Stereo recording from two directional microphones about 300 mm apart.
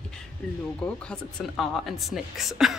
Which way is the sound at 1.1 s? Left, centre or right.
Centre.